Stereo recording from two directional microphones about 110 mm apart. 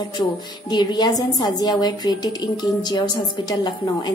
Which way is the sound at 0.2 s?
40° left (ahead or behind).